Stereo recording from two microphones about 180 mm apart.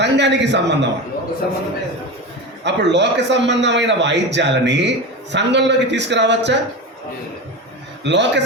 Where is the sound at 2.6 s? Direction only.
75° right (ahead or behind).